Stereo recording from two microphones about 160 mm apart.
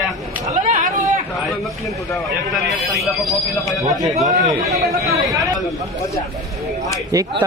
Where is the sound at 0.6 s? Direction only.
50° right (ahead or behind).